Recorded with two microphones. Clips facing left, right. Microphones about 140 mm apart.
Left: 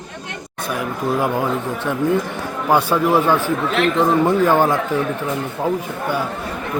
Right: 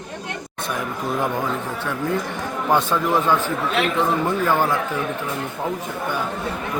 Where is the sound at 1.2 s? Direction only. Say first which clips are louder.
Left 4 dB; 15° left (ahead or behind).